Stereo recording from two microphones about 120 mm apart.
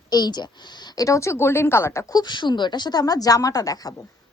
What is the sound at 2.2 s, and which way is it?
A woman's voice, 40° left (ahead or behind).